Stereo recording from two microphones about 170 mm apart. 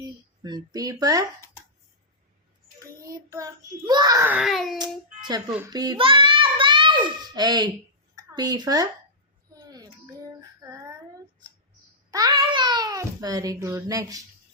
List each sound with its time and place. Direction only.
0.4 s a child's voice: 25° right (ahead or behind)
3.1 s a child's voice: 20° right (ahead or behind)
4.4 s speech: centre (ahead or behind)
4.8 s a child's voice: 25° right (ahead or behind)
9.6 s child singing: 20° right (ahead or behind)
12.1 s babbling: 25° right (ahead or behind)